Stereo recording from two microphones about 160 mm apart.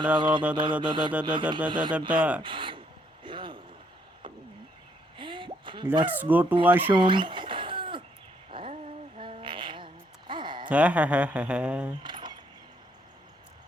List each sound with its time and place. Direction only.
0.2 s music: 30° right (ahead or behind)
2.0 s speech: 10° right (ahead or behind)
2.4 s speech: 30° right (ahead or behind)
3.2 s vehicle: 30° right (ahead or behind)
5.1 s plop: 30° right (ahead or behind)
6.1 s speech: 10° right (ahead or behind)
6.9 s a sound: 30° right (ahead or behind)
10.7 s speech: 10° right (ahead or behind)
12.0 s keys jangling: 30° right (ahead or behind)